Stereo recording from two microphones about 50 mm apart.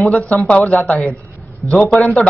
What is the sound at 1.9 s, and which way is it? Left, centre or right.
Speech, left.